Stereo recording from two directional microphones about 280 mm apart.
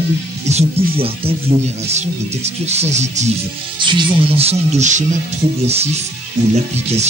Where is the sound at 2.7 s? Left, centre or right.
Right.